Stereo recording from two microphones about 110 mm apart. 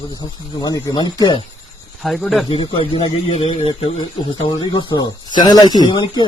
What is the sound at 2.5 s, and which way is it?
Speech, 50° left (ahead or behind).